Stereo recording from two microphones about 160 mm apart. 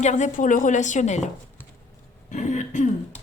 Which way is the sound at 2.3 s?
50° left (ahead or behind).